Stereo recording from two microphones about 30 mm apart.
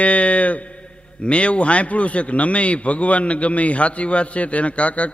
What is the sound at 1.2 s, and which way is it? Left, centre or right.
A man's voice, left.